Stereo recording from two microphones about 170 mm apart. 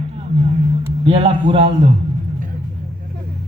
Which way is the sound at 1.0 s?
35° right (ahead or behind).